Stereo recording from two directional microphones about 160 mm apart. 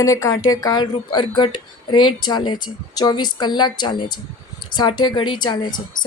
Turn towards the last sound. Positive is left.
turn(degrees=25)  # may be behind; listen again after turning